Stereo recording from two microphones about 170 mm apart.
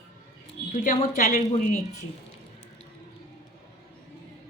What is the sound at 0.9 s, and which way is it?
Speech, 50° left (ahead or behind).